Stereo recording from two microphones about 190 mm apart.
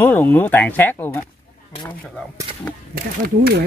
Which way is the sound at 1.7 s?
25° left (ahead or behind).